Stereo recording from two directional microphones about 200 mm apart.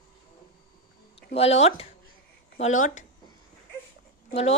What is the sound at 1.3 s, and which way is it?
A woman's voice, 30° left (ahead or behind).